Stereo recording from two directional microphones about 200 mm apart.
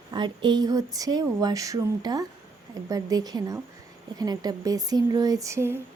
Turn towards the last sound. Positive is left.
turn(degrees=-15)  # may be behind; listen again after turning